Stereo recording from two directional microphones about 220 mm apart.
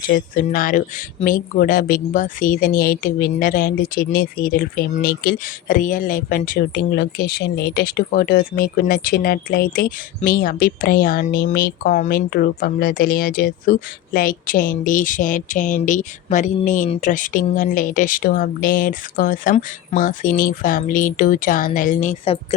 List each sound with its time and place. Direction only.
0.1 s speech: 40° left (ahead or behind)